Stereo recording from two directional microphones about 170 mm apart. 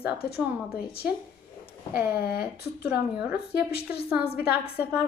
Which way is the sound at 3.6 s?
70° left (ahead or behind).